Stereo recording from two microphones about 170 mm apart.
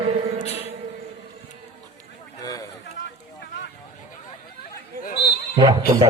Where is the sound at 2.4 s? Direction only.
20° left (ahead or behind).